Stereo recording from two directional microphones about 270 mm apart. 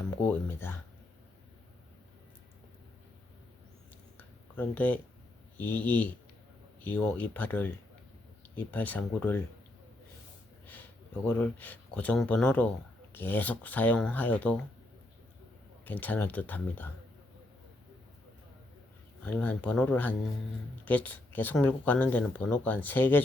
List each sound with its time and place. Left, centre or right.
0.3 s speech: centre
4.2 s a sound: centre
5.5 s speech: centre
10.7 s speech: centre
15.8 s speech: centre
19.2 s speech: centre